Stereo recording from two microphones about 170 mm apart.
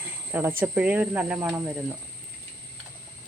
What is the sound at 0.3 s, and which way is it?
Speech, 10° right (ahead or behind).